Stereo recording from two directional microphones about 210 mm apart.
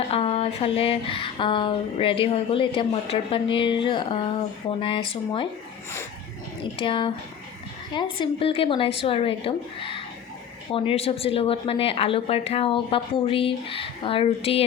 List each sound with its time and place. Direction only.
0.1 s speech: 25° left (ahead or behind)
6.6 s speech: 25° left (ahead or behind)